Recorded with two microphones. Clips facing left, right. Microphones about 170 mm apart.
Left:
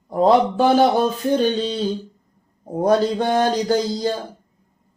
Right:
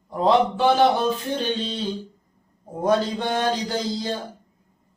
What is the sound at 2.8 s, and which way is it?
Mantra, 45° left (ahead or behind).